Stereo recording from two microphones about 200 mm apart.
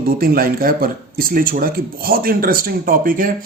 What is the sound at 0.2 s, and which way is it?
Speech, 45° right (ahead or behind).